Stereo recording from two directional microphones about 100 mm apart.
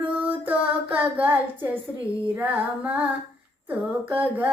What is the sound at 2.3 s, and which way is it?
Female singing, 15° right (ahead or behind).